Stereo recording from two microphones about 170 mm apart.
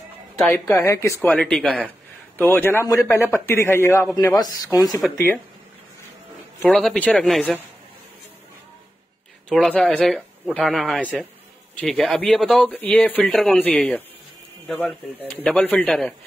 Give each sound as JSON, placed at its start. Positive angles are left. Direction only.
{"t": 0.5, "sound": "speech", "side_deg": 15}
{"t": 6.6, "sound": "speech", "side_deg": 0}
{"t": 9.5, "sound": "speech", "side_deg": 5}